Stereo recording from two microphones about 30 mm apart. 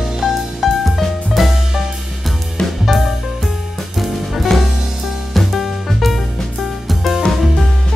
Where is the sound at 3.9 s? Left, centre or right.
Centre.